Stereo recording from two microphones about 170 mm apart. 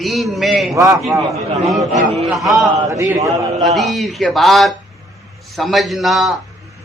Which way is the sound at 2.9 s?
20° right (ahead or behind).